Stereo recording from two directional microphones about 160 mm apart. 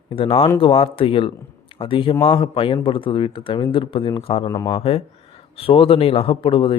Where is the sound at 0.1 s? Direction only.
35° left (ahead or behind).